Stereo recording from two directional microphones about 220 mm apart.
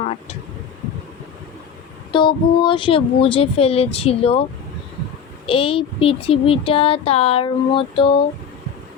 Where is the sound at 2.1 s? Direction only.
20° left (ahead or behind).